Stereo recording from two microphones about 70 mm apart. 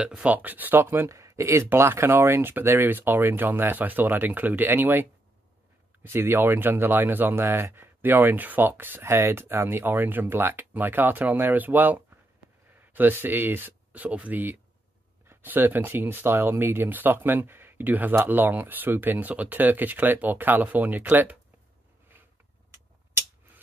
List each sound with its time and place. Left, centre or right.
0.0 s speech: centre
6.0 s speech: right